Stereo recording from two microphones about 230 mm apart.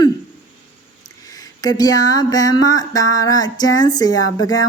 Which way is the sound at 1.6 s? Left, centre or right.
Centre.